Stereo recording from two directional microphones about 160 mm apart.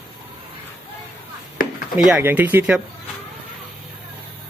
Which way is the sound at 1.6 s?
60° left (ahead or behind).